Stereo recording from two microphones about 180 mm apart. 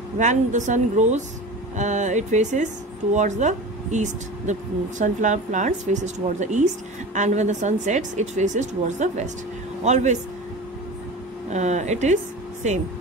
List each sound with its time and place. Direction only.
0.2 s a woman's voice: 40° right (ahead or behind)
11.5 s speech: 40° right (ahead or behind)